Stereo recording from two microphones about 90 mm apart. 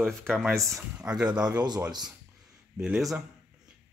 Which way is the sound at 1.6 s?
50° right (ahead or behind).